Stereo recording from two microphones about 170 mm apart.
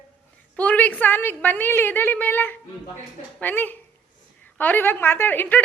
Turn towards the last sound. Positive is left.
turn(degrees=10)  # may be behind; listen again after turning